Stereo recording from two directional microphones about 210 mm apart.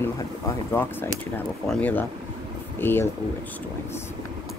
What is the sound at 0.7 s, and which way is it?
Speech, 10° left (ahead or behind).